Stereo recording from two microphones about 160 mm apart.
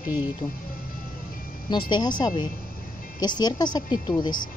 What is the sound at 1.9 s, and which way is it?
Speech, 25° left (ahead or behind).